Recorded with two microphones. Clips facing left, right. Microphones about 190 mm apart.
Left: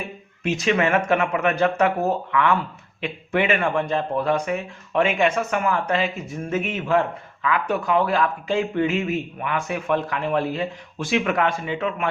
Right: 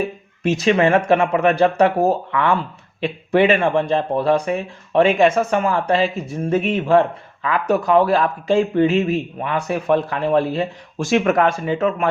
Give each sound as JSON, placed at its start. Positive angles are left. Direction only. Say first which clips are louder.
{"t": 0.4, "sound": "speech", "louder": "right 5 dB", "side_deg": -35}